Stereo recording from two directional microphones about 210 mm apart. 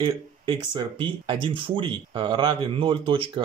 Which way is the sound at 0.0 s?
20° right (ahead or behind).